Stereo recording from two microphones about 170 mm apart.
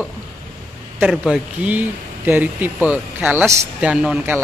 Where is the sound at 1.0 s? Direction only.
5° right (ahead or behind).